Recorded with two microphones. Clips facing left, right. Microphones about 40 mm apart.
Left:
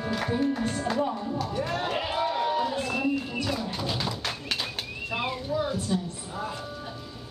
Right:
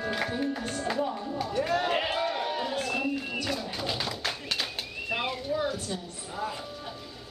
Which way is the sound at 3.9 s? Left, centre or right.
Centre.